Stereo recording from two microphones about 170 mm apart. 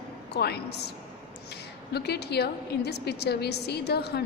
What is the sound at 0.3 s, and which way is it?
Speech, 70° left (ahead or behind).